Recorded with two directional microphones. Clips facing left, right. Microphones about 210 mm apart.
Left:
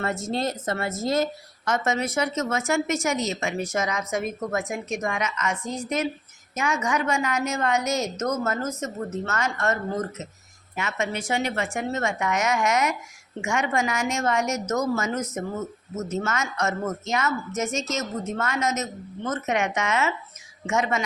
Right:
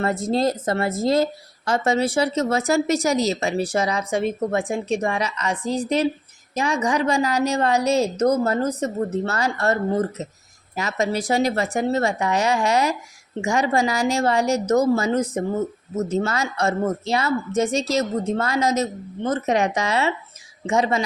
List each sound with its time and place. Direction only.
0.0 s speech: 35° right (ahead or behind)